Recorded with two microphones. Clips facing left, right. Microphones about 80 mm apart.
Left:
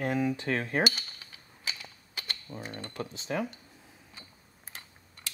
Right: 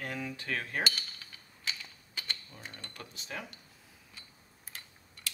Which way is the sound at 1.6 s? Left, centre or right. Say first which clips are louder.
Left 1 dB; centre.